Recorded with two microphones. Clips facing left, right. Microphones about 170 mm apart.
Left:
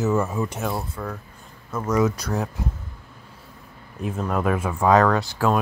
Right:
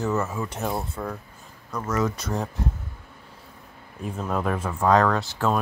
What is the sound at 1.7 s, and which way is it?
Speech, 5° left (ahead or behind).